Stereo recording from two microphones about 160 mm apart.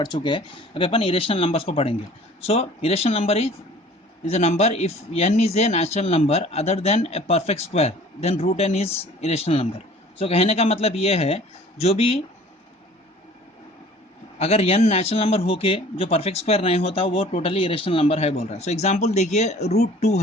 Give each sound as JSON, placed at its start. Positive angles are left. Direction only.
{"t": 0.0, "sound": "a man's voice", "side_deg": 30}
{"t": 14.3, "sound": "a man's voice", "side_deg": 40}